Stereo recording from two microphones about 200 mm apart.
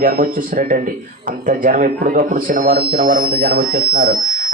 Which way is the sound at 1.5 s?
40° right (ahead or behind).